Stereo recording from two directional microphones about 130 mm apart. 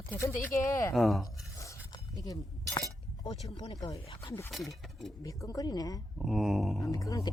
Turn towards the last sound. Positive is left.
turn(degrees=25)  # may be behind; listen again after turning